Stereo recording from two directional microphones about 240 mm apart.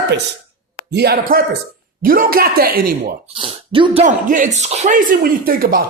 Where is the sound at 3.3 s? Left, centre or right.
Right.